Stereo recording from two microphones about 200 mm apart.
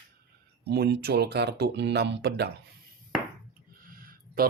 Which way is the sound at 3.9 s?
45° right (ahead or behind).